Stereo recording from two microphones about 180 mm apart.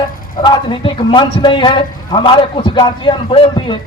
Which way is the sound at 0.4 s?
25° left (ahead or behind).